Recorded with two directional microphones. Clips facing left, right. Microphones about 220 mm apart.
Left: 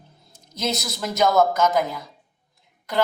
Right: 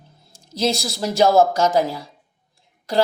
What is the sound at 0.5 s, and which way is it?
A man's voice, 30° right (ahead or behind).